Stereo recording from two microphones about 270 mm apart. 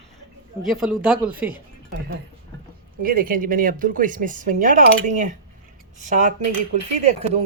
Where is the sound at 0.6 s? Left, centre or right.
Centre.